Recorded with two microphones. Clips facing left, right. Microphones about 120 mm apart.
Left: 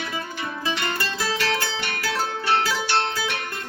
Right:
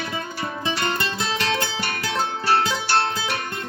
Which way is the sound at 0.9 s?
25° right (ahead or behind).